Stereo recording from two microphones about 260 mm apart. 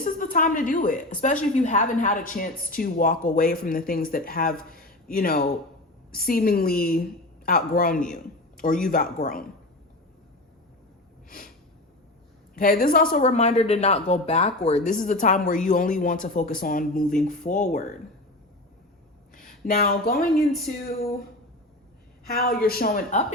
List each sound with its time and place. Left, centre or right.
0.0 s a woman's voice: left
11.3 s snort: left
12.5 s a woman's voice: left
19.3 s speech: left
22.3 s a woman's voice: left